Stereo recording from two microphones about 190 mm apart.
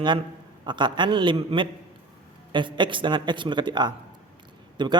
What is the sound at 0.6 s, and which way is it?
Speech, 25° right (ahead or behind).